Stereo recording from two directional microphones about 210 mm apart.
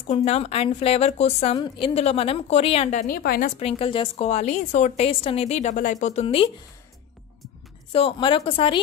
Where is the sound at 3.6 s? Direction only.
25° left (ahead or behind).